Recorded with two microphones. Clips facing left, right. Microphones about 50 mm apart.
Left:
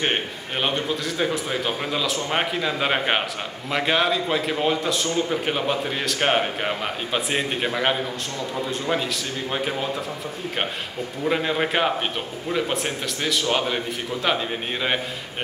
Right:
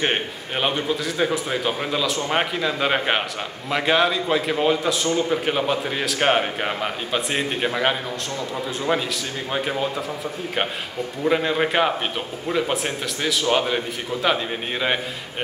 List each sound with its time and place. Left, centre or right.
0.0 s a man's voice: centre
11.2 s a man's voice: centre